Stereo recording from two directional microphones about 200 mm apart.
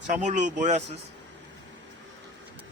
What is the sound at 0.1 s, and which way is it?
Speech, 35° right (ahead or behind).